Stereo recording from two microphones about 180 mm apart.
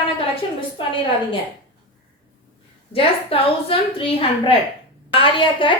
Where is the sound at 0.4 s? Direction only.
30° left (ahead or behind).